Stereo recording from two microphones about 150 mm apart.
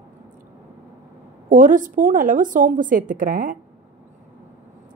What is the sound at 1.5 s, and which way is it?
A woman's voice, 60° right (ahead or behind).